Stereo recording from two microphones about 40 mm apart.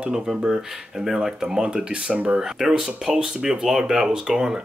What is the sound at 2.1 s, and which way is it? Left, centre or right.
Speech, right.